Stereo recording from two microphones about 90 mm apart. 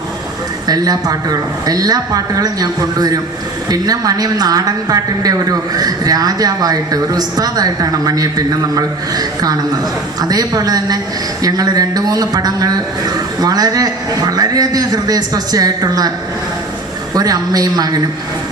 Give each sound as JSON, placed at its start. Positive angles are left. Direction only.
{"t": 0.7, "sound": "a woman's voice", "side_deg": -45}
{"t": 17.2, "sound": "a woman's voice", "side_deg": -45}